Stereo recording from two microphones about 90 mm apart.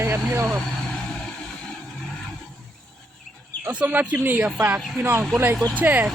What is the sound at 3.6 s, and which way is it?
Speech, 15° right (ahead or behind).